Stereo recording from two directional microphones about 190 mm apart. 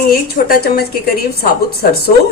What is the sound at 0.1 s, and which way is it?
A woman's voice, 55° left (ahead or behind).